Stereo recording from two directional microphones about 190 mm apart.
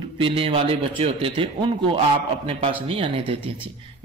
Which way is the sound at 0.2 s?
30° right (ahead or behind).